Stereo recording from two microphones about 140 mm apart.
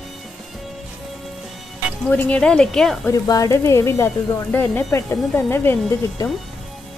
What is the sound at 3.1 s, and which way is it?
Speech, 25° left (ahead or behind).